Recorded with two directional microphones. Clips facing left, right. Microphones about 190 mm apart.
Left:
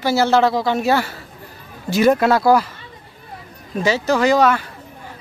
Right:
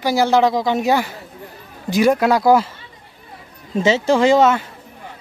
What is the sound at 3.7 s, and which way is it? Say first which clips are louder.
Speech: right 3 dB; 25° right (ahead or behind).